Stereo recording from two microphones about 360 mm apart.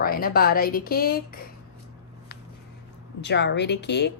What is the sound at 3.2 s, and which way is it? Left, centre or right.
Speech, left.